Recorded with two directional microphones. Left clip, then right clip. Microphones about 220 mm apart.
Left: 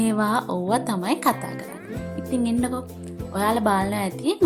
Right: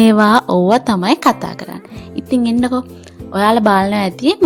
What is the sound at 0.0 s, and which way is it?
A woman's voice, 40° right (ahead or behind).